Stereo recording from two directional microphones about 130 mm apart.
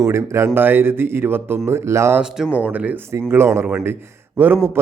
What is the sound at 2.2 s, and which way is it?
A man's voice, 5° right (ahead or behind).